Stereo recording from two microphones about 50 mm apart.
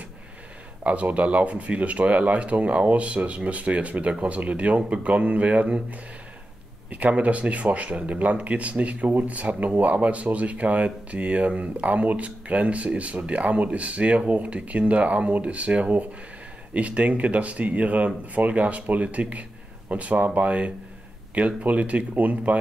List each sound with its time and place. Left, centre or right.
0.8 s speech: right